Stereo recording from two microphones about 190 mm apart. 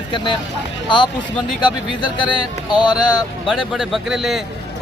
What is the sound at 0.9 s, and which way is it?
Speech, 25° left (ahead or behind).